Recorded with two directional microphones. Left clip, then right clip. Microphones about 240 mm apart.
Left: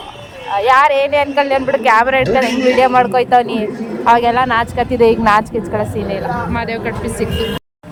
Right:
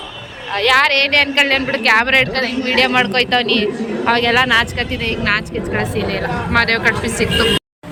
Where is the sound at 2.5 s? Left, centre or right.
Left.